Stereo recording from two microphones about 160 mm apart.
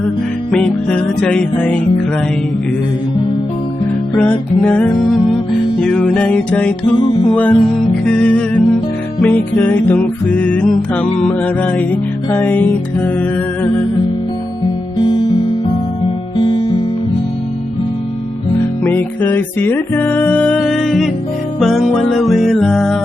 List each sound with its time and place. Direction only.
0.5 s music: 5° left (ahead or behind)
4.1 s music: 10° left (ahead or behind)
16.4 s music: 30° left (ahead or behind)
18.8 s music: 10° left (ahead or behind)